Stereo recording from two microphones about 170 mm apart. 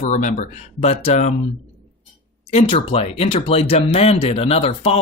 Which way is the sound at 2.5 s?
35° left (ahead or behind).